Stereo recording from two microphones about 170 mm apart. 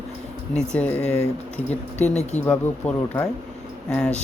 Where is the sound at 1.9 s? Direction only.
40° left (ahead or behind).